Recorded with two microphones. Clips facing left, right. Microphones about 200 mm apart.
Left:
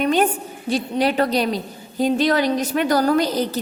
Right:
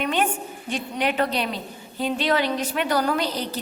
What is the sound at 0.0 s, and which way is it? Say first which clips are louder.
A woman's voice: left 6 dB; 40° left (ahead or behind).